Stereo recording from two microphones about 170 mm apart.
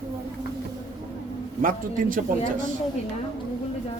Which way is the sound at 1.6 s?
55° right (ahead or behind).